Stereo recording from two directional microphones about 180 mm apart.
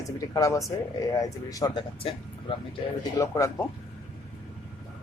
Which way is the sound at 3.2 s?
15° left (ahead or behind).